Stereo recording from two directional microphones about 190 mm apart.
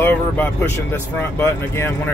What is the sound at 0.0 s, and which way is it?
Speech, 10° left (ahead or behind).